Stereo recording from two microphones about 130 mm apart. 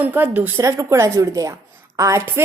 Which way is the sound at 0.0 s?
15° right (ahead or behind).